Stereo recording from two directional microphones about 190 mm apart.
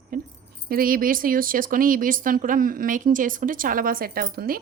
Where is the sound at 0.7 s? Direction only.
50° right (ahead or behind).